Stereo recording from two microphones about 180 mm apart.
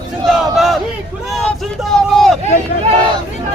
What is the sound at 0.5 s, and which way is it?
A man's voice, centre (ahead or behind).